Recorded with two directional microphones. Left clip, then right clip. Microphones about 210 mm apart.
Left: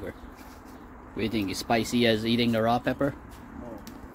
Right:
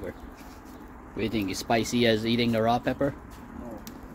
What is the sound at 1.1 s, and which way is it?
Speech, 10° left (ahead or behind).